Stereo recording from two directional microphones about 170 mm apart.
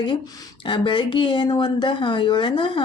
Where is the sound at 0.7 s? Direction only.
30° left (ahead or behind).